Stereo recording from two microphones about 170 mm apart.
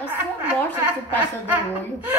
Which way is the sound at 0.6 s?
10° left (ahead or behind).